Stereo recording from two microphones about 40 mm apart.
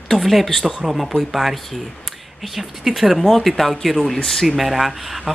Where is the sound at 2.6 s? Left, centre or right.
Centre.